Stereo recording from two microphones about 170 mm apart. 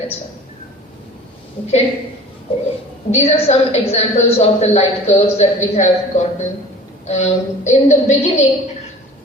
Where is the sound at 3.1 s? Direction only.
35° left (ahead or behind).